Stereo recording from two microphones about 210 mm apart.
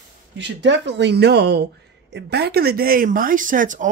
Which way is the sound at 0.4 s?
55° right (ahead or behind).